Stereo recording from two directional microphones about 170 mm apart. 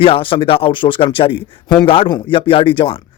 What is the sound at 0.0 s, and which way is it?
Speech, 30° left (ahead or behind).